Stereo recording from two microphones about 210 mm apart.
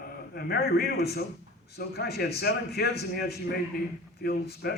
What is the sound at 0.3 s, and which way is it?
A man's voice, 50° left (ahead or behind).